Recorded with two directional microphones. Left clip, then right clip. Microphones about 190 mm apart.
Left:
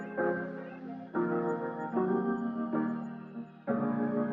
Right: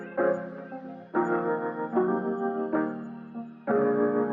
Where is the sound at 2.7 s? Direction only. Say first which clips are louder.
Right 5 dB; centre (ahead or behind).